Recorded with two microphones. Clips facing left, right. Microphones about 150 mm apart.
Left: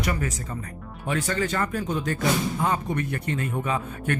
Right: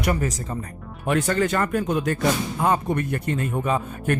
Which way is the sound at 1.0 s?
60° right (ahead or behind).